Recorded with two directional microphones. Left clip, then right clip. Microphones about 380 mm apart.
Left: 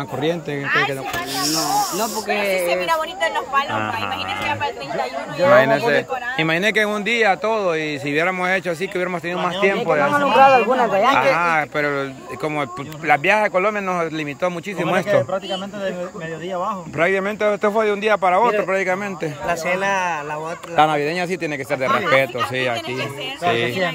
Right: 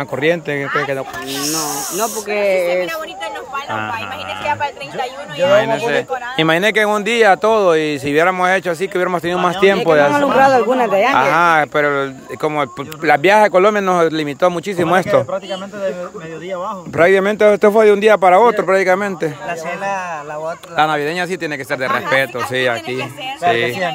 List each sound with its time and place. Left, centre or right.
0.2 s speech: centre
3.5 s speech: centre
4.6 s speech: right
5.7 s speech: centre; by 11.1 s right
11.1 s speech: centre
19.4 s speech: centre